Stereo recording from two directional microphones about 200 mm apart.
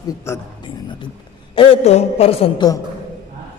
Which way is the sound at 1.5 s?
25° left (ahead or behind).